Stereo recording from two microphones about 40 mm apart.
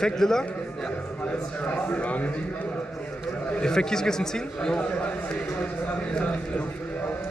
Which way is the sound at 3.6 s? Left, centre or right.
Centre.